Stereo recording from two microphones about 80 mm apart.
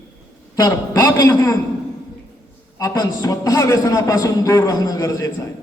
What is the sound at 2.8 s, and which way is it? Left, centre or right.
A man's voice, left.